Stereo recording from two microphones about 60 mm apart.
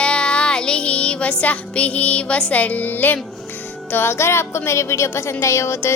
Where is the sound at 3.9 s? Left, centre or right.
Left.